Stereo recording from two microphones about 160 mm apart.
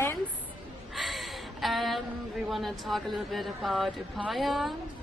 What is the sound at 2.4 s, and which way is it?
Speech, centre (ahead or behind).